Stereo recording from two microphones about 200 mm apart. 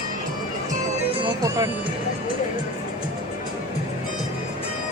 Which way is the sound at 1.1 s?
15° right (ahead or behind).